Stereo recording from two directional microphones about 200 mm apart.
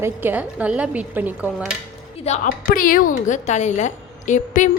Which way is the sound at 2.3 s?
45° left (ahead or behind).